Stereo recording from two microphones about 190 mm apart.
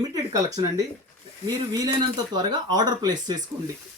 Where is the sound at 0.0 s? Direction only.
20° right (ahead or behind).